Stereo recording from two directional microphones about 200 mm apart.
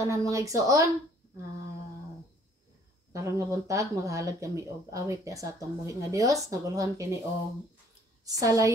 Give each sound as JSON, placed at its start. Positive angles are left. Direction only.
{"t": 0.0, "sound": "speech", "side_deg": -15}
{"t": 3.1, "sound": "speech", "side_deg": -15}
{"t": 8.3, "sound": "speech", "side_deg": -15}